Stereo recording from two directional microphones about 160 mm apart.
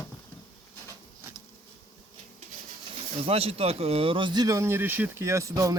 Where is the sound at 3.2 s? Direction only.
40° right (ahead or behind).